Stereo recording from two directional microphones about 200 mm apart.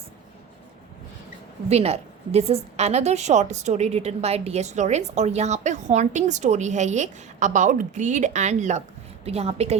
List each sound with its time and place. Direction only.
1.7 s a woman's voice: 30° right (ahead or behind)